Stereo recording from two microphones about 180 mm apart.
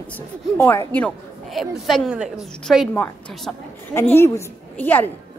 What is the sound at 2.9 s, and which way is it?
A woman's voice, 10° left (ahead or behind).